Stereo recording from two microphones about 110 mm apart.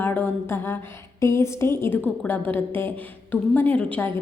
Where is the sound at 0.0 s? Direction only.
20° left (ahead or behind).